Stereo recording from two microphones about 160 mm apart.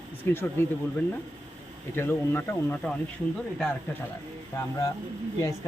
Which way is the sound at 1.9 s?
15° left (ahead or behind).